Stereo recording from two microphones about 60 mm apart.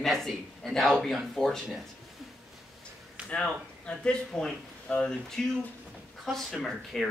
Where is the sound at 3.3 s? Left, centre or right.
Centre.